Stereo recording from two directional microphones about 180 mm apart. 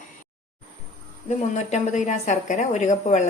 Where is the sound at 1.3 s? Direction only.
40° left (ahead or behind).